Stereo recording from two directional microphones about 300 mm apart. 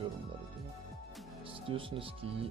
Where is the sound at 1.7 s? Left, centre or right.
Centre.